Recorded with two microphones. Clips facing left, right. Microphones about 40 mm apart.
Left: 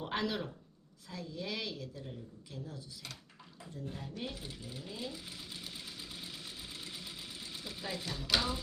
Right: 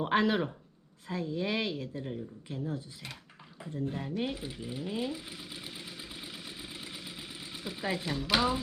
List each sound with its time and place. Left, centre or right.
0.0 s speech: right
4.4 s sewing machine: centre
7.9 s speech: centre